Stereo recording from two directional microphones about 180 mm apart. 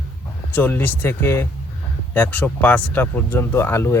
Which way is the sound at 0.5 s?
10° left (ahead or behind).